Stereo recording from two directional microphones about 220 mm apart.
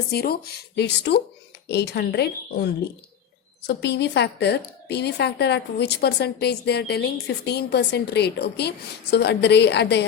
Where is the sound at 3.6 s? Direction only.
50° left (ahead or behind).